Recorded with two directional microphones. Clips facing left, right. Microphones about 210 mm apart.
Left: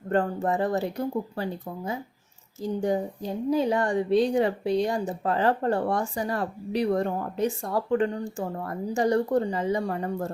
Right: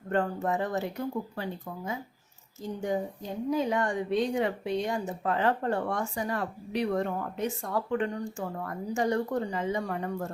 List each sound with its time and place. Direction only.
0.1 s speech: 35° left (ahead or behind)